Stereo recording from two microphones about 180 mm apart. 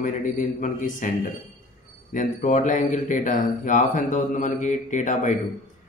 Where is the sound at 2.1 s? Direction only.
45° left (ahead or behind).